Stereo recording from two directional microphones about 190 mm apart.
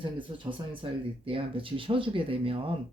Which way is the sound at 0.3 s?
25° right (ahead or behind).